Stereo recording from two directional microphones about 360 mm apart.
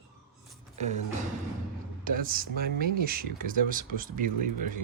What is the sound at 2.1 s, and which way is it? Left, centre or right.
Speech, right.